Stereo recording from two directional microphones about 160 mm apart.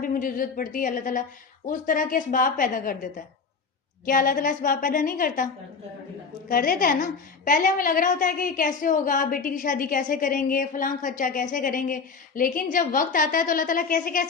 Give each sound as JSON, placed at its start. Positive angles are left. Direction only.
{"t": 0.0, "sound": "a woman's voice", "side_deg": 60}
{"t": 6.5, "sound": "a woman's voice", "side_deg": 60}